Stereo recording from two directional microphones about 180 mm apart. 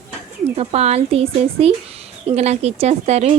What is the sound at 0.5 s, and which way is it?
Speech, 35° right (ahead or behind).